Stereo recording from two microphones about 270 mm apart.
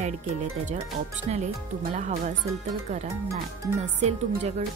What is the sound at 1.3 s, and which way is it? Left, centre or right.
Speech, right.